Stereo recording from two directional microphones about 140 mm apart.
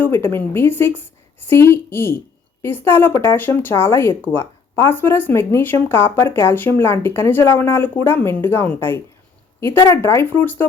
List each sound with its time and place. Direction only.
0.0 s speech: 15° left (ahead or behind)